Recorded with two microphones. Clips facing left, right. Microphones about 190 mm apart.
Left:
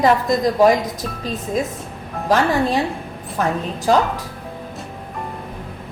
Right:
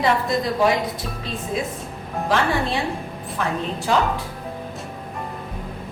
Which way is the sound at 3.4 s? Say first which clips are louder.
Left 4 dB; 40° left (ahead or behind).